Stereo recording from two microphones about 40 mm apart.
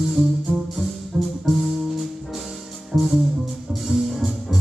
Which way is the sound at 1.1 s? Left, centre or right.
Centre.